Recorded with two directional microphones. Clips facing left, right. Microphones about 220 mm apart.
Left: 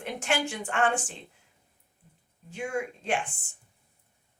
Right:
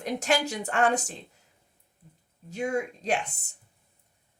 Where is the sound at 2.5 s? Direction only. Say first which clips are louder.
Right 3 dB; 40° right (ahead or behind).